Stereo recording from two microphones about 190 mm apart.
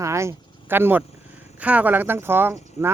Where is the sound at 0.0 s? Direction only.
15° right (ahead or behind).